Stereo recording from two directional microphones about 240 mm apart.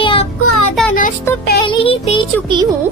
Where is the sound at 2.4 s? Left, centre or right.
Centre.